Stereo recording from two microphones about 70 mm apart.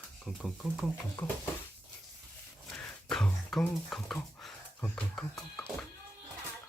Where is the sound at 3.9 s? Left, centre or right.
Centre.